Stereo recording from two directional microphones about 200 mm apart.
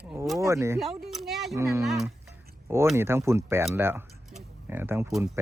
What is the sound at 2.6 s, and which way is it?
Speech, 15° right (ahead or behind).